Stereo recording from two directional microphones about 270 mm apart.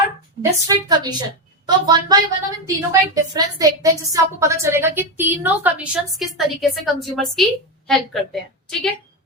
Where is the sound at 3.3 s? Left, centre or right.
Centre.